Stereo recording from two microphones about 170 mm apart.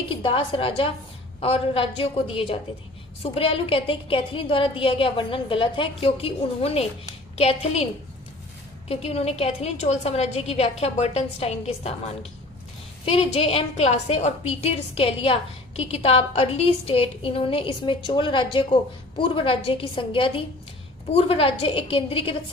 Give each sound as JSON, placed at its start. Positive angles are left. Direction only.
{"t": 0.1, "sound": "a woman's voice", "side_deg": 30}
{"t": 8.9, "sound": "a woman's voice", "side_deg": 35}